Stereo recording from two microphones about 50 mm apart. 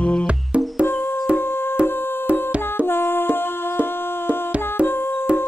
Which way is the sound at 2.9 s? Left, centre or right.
Left.